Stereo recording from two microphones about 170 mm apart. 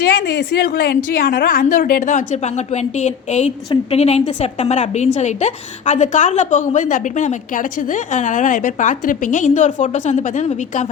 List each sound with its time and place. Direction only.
0.2 s a woman's voice: 90° left
0.7 s a woman's voice: 55° left (ahead or behind)